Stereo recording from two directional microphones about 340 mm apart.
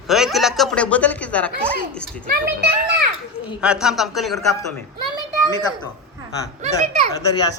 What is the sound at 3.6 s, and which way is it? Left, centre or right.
Speech, centre.